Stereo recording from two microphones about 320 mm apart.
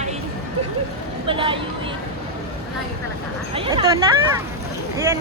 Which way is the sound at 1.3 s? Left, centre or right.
Centre.